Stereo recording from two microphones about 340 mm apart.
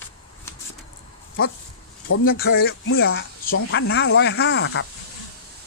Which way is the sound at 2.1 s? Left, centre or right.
Left.